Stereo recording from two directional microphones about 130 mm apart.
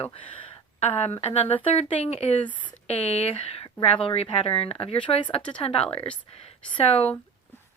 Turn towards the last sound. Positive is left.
turn(degrees=50)  # may be behind; listen again after turning